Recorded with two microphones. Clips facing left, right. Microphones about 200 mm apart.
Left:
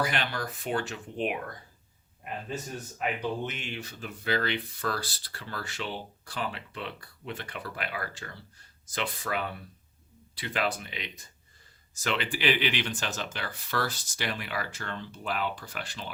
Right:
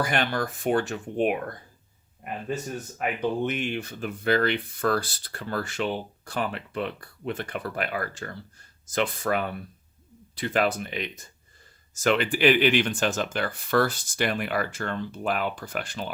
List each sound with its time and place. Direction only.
0.0 s speech: 50° right (ahead or behind)
3.0 s speech: 55° right (ahead or behind)